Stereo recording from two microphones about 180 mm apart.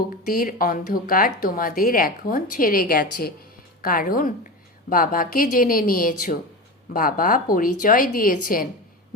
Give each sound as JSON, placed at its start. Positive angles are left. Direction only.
{"t": 0.3, "sound": "a woman's voice", "side_deg": 55}